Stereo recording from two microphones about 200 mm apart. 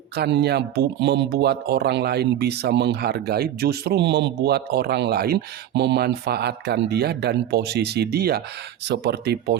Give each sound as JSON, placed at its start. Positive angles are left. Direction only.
{"t": 0.2, "sound": "speech", "side_deg": -55}